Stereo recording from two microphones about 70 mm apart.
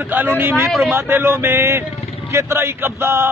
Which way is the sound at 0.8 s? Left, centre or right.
Right.